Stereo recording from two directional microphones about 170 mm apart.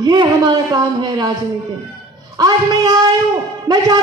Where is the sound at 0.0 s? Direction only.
25° right (ahead or behind).